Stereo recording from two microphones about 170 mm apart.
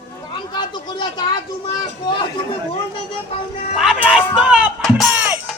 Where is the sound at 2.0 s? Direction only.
25° left (ahead or behind).